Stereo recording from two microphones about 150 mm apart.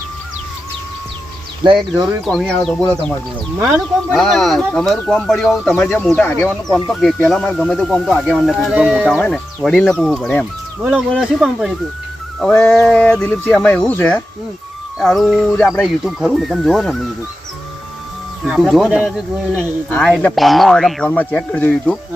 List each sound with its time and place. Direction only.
1.6 s speech: 30° right (ahead or behind)
2.2 s speech: 5° left (ahead or behind)
4.1 s speech: centre (ahead or behind)
6.8 s speech: centre (ahead or behind)
18.4 s speech: 5° right (ahead or behind)